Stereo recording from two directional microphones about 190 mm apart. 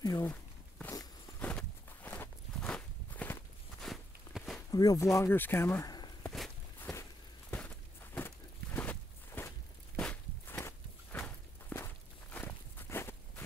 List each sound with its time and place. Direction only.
0.0 s walk: 15° left (ahead or behind); by 4.6 s centre (ahead or behind)
4.6 s speech: 20° left (ahead or behind)
6.3 s walk: centre (ahead or behind)